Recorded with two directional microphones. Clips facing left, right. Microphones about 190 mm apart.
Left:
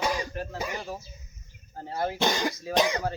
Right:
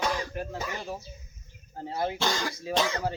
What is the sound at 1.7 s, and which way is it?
Speech, 10° right (ahead or behind).